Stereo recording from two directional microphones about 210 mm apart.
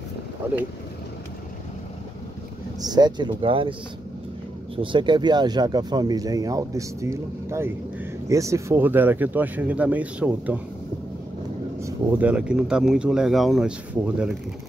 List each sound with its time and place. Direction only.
2.8 s speech: 20° right (ahead or behind)
4.7 s speech: 20° right (ahead or behind); by 10.6 s 5° right (ahead or behind)
11.8 s speech: 10° right (ahead or behind)